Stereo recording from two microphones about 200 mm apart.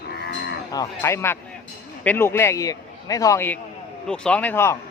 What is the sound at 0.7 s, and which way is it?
A man's voice, 15° left (ahead or behind).